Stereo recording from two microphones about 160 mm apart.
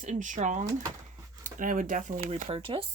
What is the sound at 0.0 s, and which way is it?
Speech, 50° right (ahead or behind).